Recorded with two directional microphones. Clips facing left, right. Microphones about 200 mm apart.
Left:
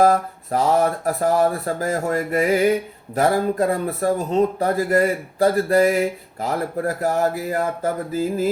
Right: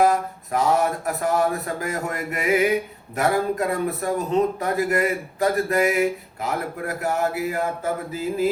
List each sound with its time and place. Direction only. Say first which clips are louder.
0.0 s speech: left 3 dB; 35° left (ahead or behind)